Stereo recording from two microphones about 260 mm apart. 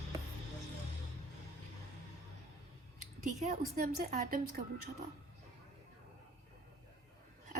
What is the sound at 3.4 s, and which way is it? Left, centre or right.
Speech, right.